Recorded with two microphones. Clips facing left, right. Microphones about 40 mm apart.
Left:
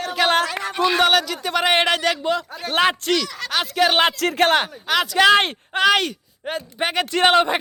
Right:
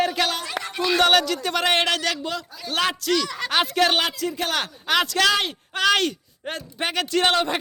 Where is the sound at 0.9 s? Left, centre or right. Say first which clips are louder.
Right 3 dB; centre; by 3.1 s left.